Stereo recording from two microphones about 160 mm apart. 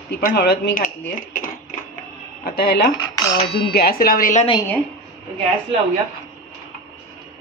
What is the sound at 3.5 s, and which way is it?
Speech, 90° left.